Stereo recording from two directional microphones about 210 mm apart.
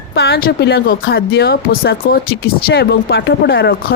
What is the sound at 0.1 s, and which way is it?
Speech, 50° left (ahead or behind).